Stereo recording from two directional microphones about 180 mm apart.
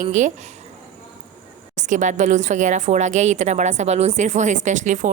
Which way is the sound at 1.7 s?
45° right (ahead or behind).